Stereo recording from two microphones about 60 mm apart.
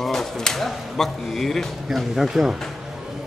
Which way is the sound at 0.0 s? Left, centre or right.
Centre.